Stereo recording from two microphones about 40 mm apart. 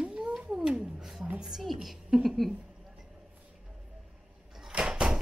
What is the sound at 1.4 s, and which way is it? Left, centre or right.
A woman's voice, centre.